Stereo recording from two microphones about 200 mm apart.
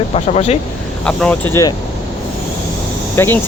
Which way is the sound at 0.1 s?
30° left (ahead or behind).